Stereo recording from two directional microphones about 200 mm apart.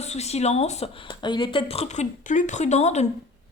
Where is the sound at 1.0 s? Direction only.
20° left (ahead or behind).